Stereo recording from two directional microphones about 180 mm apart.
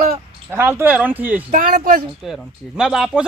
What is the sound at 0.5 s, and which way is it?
Speech, 10° right (ahead or behind).